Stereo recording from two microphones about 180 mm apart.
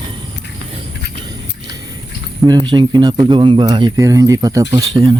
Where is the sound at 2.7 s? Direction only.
25° right (ahead or behind).